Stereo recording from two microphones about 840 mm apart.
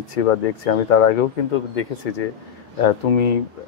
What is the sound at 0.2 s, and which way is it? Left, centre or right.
A man's voice, left.